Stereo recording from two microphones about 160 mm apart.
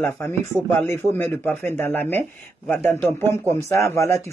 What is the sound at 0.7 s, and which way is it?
Speech, 15° left (ahead or behind).